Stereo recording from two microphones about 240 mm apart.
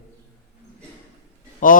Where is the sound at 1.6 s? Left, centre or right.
Left.